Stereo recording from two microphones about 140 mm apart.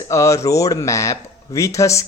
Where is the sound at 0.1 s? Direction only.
20° left (ahead or behind).